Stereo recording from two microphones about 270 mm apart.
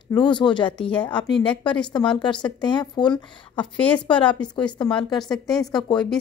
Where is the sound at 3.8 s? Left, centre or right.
Centre.